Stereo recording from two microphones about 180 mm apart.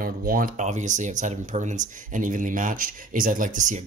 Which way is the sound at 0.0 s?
55° right (ahead or behind).